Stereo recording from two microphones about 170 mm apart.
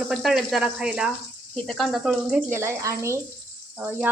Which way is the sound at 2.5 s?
15° right (ahead or behind).